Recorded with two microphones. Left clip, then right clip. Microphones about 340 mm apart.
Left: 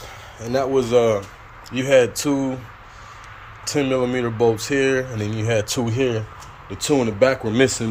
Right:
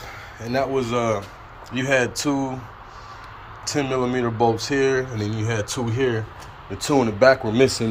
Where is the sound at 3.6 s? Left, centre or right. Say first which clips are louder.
Left 3 dB; centre.